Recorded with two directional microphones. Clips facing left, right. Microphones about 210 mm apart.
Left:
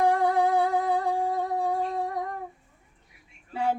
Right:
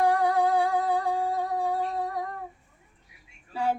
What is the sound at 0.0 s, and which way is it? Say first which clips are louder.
Humming: left 1 dB; 25° left (ahead or behind).